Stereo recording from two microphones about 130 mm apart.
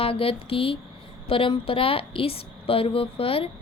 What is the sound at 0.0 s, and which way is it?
A woman's voice, 45° left (ahead or behind).